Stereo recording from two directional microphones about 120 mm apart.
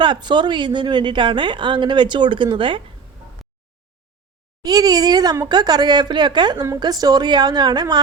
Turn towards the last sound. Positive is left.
turn(degrees=-35)  # may be behind; listen again after turning